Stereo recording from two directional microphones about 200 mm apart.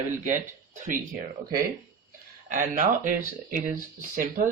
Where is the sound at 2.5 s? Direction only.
40° right (ahead or behind).